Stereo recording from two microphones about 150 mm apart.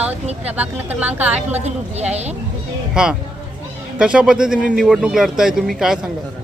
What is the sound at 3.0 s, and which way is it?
Speech, 5° right (ahead or behind).